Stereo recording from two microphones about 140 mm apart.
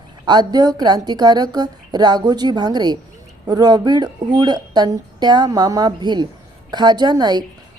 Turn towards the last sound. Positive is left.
turn(degrees=-30)  # may be behind; listen again after turning